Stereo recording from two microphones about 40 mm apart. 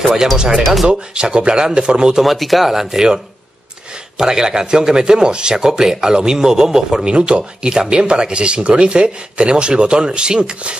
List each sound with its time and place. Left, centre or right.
0.0 s speech: centre
2.2 s speech: centre
2.7 s speech: centre
4.2 s speech: centre
7.1 s speech: right